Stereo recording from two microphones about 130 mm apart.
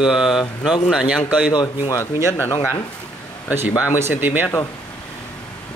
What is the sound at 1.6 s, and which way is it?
Speech, 25° left (ahead or behind).